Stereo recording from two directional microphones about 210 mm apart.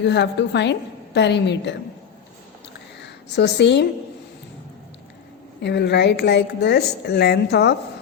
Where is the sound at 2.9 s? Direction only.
55° left (ahead or behind).